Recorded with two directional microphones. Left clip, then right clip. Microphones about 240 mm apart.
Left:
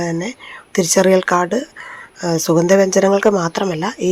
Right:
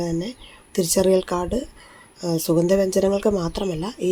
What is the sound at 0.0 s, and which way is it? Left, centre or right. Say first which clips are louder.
Speech: left 5 dB; centre.